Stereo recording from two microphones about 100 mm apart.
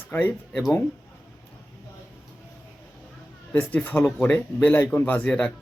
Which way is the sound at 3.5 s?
20° left (ahead or behind).